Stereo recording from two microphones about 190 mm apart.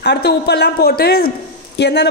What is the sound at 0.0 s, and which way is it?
A woman's voice, 60° left (ahead or behind).